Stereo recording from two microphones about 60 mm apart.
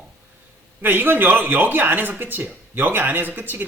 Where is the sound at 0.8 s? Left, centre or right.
Right.